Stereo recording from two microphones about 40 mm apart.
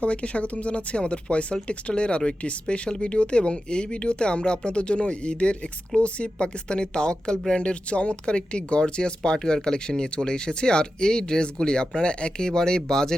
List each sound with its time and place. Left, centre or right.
0.0 s speech: left; by 13.1 s centre